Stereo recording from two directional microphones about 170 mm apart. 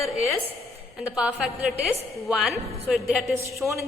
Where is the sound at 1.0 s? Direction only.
5° right (ahead or behind).